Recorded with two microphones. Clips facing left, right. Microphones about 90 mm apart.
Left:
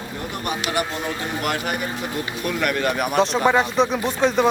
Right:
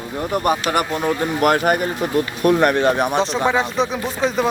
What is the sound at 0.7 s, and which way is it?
Speech, 50° right (ahead or behind).